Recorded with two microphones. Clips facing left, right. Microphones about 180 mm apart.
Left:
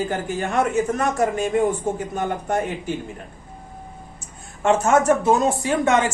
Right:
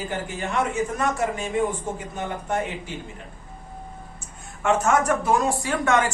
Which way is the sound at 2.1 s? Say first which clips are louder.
Left 1 dB; 45° left (ahead or behind).